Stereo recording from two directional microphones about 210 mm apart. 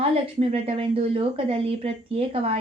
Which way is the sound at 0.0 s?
30° right (ahead or behind).